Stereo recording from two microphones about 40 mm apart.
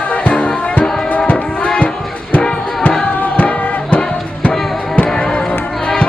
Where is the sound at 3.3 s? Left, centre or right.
Left.